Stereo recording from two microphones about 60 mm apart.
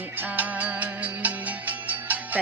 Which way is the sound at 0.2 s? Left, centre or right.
Right.